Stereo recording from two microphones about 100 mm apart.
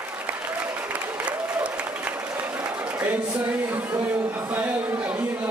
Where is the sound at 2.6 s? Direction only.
20° right (ahead or behind).